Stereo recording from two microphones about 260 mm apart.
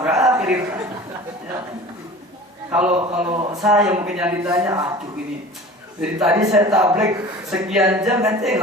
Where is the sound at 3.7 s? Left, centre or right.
Centre.